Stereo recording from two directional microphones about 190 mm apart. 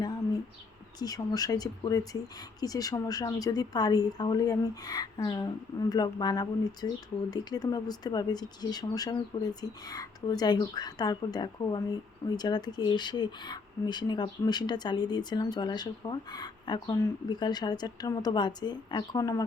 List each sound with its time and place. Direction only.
0.9 s speech: 20° left (ahead or behind)